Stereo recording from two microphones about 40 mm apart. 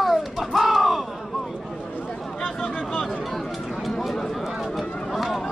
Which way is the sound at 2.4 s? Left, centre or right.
Left.